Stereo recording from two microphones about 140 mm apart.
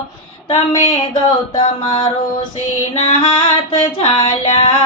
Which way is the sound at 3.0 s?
30° left (ahead or behind).